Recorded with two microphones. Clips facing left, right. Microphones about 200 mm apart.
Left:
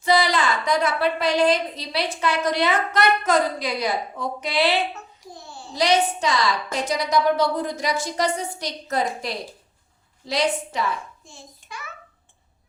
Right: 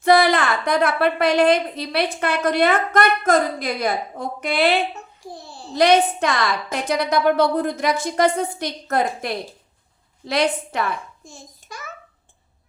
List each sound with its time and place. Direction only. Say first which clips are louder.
0.0 s a woman's voice: right 4 dB; 55° right (ahead or behind)
5.2 s babbling: right 3 dB; 35° right (ahead or behind)
5.7 s a woman's voice: right 5 dB; 55° right (ahead or behind)
11.3 s a child's voice: right 2 dB; 40° right (ahead or behind)